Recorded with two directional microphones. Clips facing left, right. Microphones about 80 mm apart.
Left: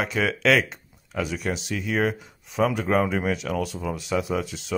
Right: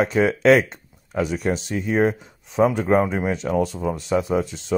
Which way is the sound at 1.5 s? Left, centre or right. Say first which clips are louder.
Right 4 dB; right.